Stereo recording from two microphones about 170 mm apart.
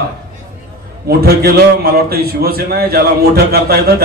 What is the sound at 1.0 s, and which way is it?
A man's voice, 65° right (ahead or behind).